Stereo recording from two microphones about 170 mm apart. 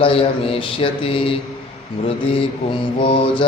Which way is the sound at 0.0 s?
30° left (ahead or behind).